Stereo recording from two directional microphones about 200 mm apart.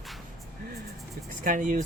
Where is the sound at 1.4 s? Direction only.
40° right (ahead or behind).